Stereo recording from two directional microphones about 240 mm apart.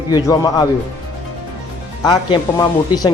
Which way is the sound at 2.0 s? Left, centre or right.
Centre.